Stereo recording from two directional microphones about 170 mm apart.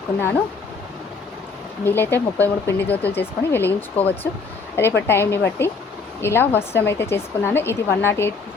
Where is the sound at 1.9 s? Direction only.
10° left (ahead or behind).